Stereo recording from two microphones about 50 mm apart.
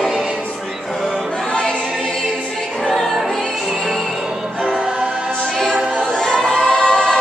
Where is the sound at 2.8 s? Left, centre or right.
Centre.